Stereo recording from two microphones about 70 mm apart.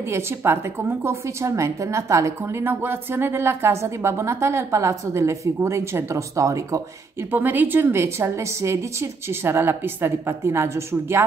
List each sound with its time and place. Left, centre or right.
0.1 s a woman's voice: right
2.6 s a woman's voice: right
7.2 s a woman's voice: right